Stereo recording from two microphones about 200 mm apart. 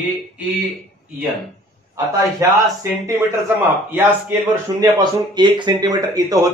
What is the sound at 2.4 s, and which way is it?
Speech, 15° right (ahead or behind).